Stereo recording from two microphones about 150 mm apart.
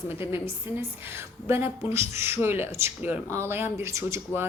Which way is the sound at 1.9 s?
20° right (ahead or behind).